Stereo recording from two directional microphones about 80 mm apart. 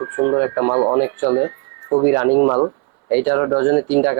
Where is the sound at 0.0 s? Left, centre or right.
Right.